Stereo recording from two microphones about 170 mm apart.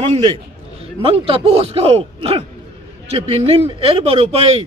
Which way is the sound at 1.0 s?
35° right (ahead or behind).